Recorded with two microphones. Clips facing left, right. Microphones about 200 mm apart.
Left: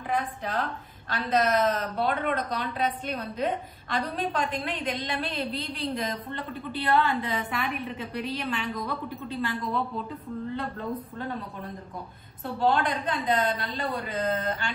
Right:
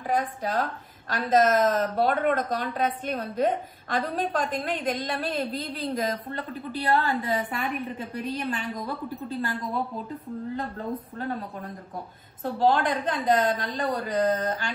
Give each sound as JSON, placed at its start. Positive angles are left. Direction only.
{"t": 0.1, "sound": "a woman's voice", "side_deg": -40}
{"t": 12.5, "sound": "a woman's voice", "side_deg": -40}